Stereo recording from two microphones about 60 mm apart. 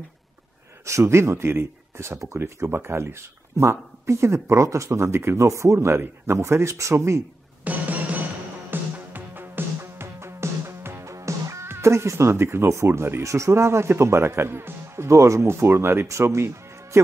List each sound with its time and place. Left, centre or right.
0.8 s speech: right
7.6 s music: right
11.6 s speech: right
15.5 s speech: right